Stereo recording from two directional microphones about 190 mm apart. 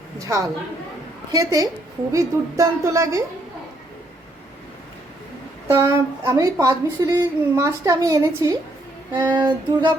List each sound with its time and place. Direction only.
0.3 s a woman's voice: 15° right (ahead or behind)
5.6 s a woman's voice: 15° right (ahead or behind)